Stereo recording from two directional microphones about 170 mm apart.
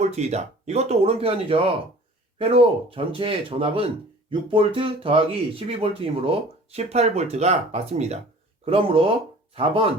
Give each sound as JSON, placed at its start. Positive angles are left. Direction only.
{"t": 0.0, "sound": "speech", "side_deg": -40}